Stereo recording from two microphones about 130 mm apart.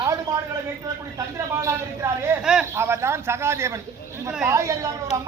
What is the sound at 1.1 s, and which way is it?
A woman's voice, 25° right (ahead or behind).